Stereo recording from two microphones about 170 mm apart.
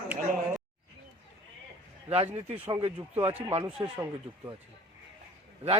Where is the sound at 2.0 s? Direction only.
35° right (ahead or behind).